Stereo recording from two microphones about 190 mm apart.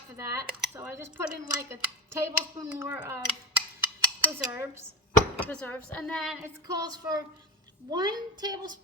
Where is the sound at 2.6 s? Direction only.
10° right (ahead or behind).